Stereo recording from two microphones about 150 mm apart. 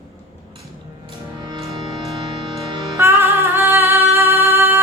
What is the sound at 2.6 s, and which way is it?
Music, 20° right (ahead or behind).